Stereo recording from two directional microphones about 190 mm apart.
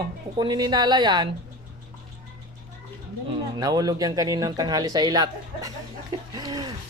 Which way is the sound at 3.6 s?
20° right (ahead or behind).